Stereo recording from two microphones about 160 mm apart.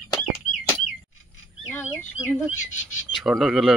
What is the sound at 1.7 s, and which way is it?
Speech, 10° left (ahead or behind).